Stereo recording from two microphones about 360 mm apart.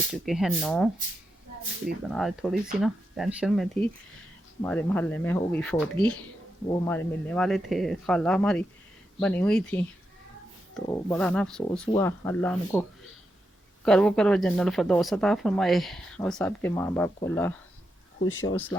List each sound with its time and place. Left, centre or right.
0.1 s speech: centre
2.0 s speech: centre
13.8 s speech: centre
18.2 s speech: left
18.5 s speech: centre